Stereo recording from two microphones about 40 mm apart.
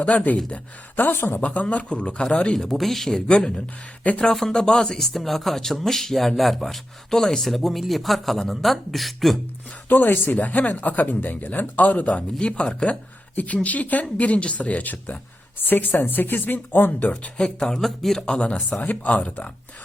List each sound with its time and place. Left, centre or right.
0.0 s speech: left
0.9 s speech: left
1.4 s speech: left
2.6 s speech: centre
3.2 s speech: left
4.4 s speech: centre
7.1 s speech: centre
7.5 s speech: centre
9.9 s speech: left
10.3 s speech: left
12.0 s speech: left
17.3 s speech: centre
18.2 s speech: left